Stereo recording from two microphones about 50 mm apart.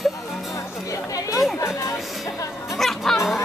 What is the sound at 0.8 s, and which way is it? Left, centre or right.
Chatter, left.